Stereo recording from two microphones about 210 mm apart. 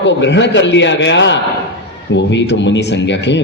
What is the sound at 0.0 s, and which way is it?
A man's voice, 60° left (ahead or behind).